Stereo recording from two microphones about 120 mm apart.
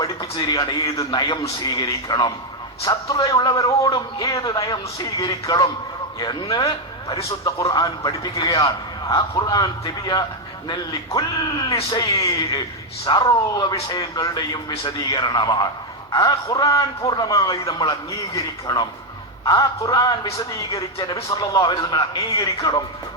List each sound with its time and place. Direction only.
0.0 s a man's voice: 35° left (ahead or behind)